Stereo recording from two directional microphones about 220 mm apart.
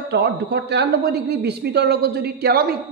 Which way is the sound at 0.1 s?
50° right (ahead or behind).